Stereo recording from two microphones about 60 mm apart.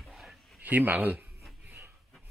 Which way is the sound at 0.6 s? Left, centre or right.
Right.